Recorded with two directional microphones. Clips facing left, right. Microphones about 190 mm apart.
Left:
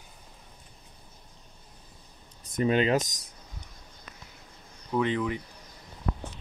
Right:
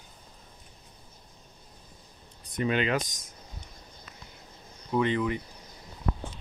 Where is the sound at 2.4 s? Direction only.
45° left (ahead or behind).